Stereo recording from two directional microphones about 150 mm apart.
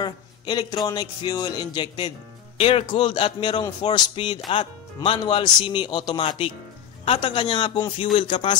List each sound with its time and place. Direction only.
0.0 s speech: 30° left (ahead or behind)